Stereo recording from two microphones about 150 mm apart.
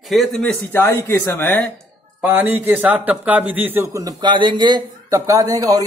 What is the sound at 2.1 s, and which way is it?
A man's voice, 10° right (ahead or behind).